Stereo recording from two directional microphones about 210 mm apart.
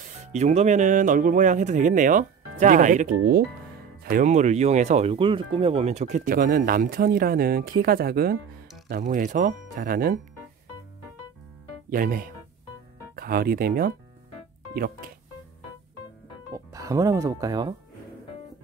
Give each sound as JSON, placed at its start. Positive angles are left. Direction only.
{"t": 0.3, "sound": "speech", "side_deg": -30}
{"t": 11.9, "sound": "speech", "side_deg": -45}
{"t": 16.5, "sound": "speech", "side_deg": -15}